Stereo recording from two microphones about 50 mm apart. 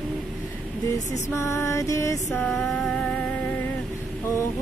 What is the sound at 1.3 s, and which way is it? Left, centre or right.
Mantra, left.